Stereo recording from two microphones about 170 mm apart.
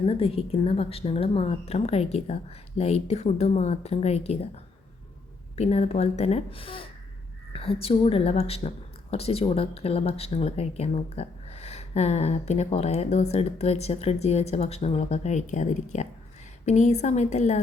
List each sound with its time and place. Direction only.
0.0 s a woman's voice: 35° left (ahead or behind)
5.5 s a woman's voice: 40° left (ahead or behind)